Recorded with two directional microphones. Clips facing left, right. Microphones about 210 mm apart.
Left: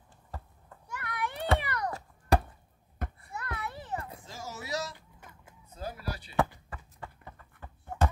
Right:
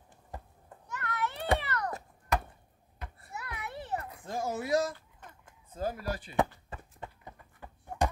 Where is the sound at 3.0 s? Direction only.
50° left (ahead or behind).